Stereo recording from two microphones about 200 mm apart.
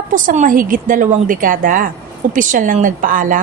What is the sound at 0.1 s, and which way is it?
A woman's voice, 40° right (ahead or behind).